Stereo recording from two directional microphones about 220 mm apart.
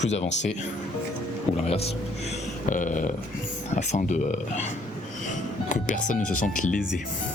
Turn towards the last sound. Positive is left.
turn(degrees=35)  # may be behind; listen again after turning